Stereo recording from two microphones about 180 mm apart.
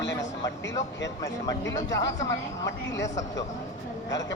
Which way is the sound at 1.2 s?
20° left (ahead or behind).